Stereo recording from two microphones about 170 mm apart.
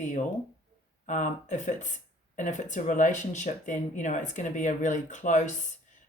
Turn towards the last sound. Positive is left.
turn(degrees=45)  # may be behind; listen again after turning